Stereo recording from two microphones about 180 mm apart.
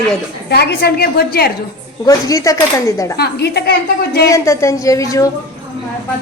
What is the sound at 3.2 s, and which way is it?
A woman's voice, 65° left (ahead or behind).